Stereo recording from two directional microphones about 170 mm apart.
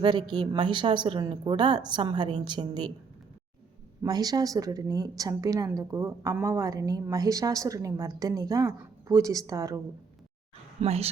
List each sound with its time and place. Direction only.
0.0 s a woman's voice: 25° right (ahead or behind)
4.0 s a woman's voice: 20° right (ahead or behind)
10.8 s speech: 35° right (ahead or behind)